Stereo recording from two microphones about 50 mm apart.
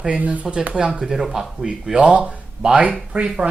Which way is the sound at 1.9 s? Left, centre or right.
Right.